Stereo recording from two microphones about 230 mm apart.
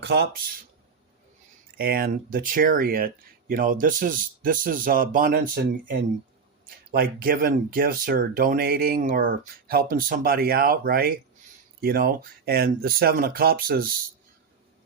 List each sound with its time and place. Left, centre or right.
0.0 s speech: right
1.8 s speech: right
6.9 s speech: right